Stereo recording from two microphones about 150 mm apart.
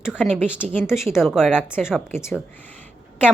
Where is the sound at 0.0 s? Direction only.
5° right (ahead or behind).